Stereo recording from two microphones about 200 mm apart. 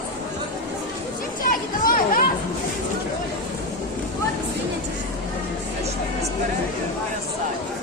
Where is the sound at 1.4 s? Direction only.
45° left (ahead or behind).